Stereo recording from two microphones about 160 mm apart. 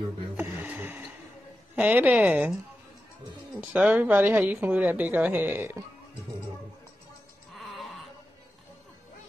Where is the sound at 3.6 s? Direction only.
10° right (ahead or behind).